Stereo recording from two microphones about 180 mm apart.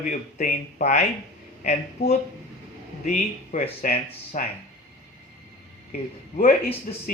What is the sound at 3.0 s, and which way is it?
Speech, 45° left (ahead or behind).